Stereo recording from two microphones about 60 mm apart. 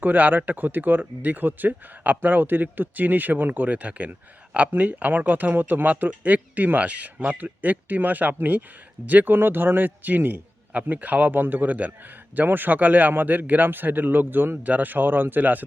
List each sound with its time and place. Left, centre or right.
0.0 s a man's voice: right